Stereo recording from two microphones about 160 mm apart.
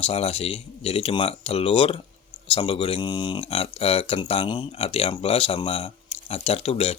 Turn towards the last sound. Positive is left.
turn(degrees=40)  # may be behind; listen again after turning